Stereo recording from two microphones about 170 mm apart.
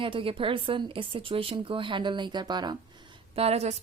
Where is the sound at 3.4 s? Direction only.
40° right (ahead or behind).